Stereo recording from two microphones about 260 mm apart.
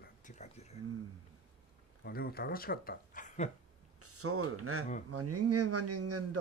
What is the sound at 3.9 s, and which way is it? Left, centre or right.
A man's voice, right.